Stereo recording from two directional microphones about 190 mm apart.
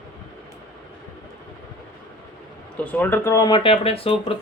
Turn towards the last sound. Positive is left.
turn(degrees=30)  # may be behind; listen again after turning